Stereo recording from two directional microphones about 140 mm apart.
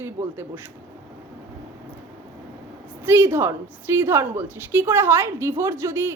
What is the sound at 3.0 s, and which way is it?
A woman's voice, 15° right (ahead or behind).